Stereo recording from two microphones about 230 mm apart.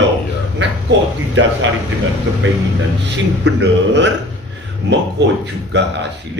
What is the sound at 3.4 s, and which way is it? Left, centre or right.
A man's voice, right.